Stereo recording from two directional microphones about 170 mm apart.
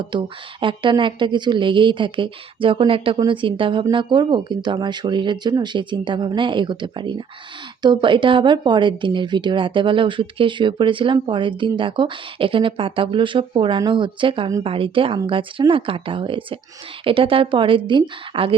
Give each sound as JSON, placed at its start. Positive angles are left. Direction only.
{"t": 0.0, "sound": "a woman's voice", "side_deg": -30}